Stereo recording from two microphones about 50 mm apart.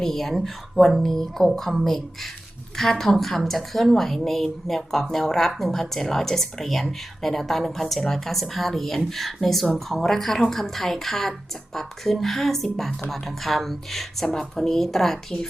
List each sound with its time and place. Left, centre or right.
0.0 s a woman's voice: centre